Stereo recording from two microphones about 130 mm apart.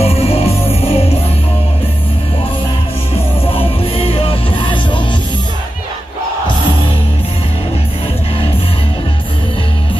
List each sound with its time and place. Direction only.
0.0 s music: 50° left (ahead or behind)
3.4 s music: 45° left (ahead or behind)